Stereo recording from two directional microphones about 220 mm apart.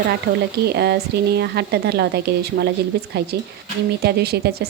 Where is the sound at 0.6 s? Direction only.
50° right (ahead or behind).